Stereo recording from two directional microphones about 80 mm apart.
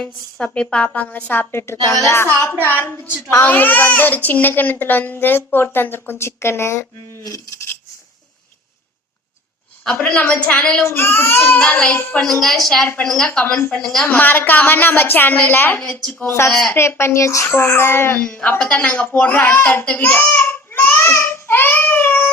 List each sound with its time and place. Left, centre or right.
0.0 s a woman's voice: centre; by 6.8 s left
7.3 s cutlery: left
9.8 s a woman's voice: centre
10.2 s a woman's voice: left
10.8 s a woman's voice: left; by 14.1 s centre
14.1 s a woman's voice: left
16.2 s a child's voice: left
16.5 s a woman's voice: centre
16.7 s a child's voice: left
18.2 s a woman's voice: centre
20.1 s a sound: left